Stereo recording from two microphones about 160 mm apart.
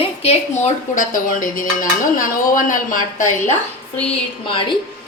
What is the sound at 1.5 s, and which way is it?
Speech, 55° left (ahead or behind).